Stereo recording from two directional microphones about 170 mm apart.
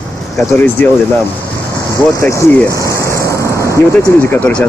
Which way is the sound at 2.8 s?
15° left (ahead or behind).